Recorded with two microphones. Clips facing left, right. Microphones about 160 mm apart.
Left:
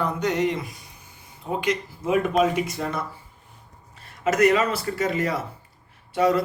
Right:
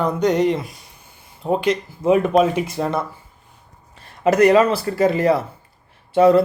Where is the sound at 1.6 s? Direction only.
30° right (ahead or behind).